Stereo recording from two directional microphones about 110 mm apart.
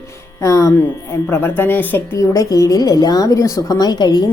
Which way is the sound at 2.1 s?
30° left (ahead or behind).